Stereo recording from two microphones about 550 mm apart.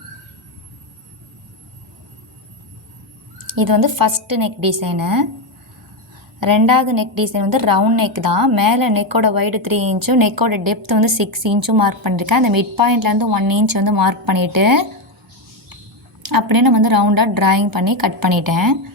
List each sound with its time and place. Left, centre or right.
3.4 s a woman's voice: right
6.4 s a woman's voice: right
16.2 s a woman's voice: right